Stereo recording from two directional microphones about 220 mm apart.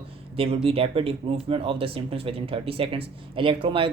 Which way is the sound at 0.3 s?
25° right (ahead or behind).